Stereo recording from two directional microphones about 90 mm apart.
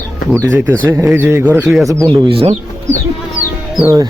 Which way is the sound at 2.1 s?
85° right.